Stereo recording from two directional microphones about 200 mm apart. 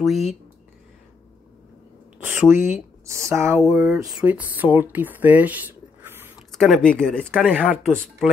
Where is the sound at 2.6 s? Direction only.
35° left (ahead or behind).